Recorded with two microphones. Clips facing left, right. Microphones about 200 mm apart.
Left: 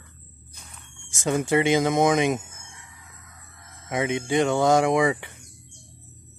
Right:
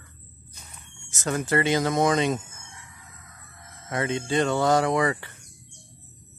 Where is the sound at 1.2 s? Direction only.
20° left (ahead or behind).